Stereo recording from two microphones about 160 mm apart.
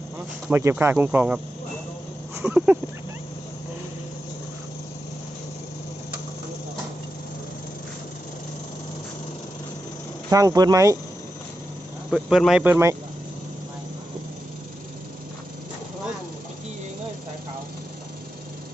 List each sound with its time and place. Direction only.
0.5 s speech: 15° right (ahead or behind)
2.4 s speech: 10° right (ahead or behind)
10.2 s speech: 20° right (ahead or behind)
12.1 s speech: centre (ahead or behind)
12.6 s speech: 15° right (ahead or behind)